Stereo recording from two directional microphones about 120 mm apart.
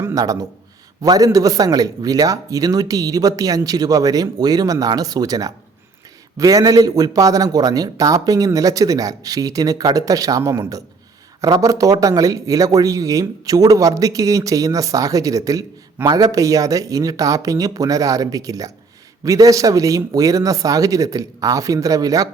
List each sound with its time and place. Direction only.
0.1 s a man's voice: 30° right (ahead or behind)